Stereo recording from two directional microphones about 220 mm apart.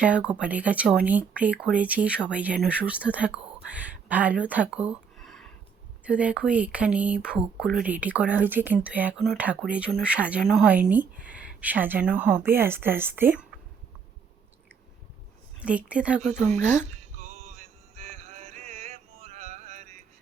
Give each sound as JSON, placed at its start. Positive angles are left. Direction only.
{"t": 0.0, "sound": "speech", "side_deg": -5}
{"t": 15.6, "sound": "speech", "side_deg": -5}
{"t": 16.2, "sound": "speech", "side_deg": 10}
{"t": 17.2, "sound": "music", "side_deg": -30}